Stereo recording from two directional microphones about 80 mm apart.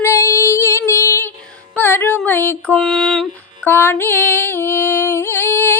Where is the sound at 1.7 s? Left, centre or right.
Left.